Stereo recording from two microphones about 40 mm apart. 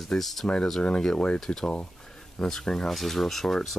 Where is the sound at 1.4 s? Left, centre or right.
Centre.